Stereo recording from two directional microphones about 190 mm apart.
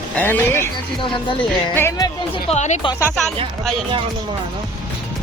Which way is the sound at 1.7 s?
15° left (ahead or behind).